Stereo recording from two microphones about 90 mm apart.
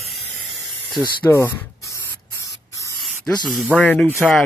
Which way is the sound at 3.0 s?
Centre (ahead or behind).